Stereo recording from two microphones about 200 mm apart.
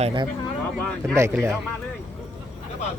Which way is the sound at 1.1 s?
15° right (ahead or behind).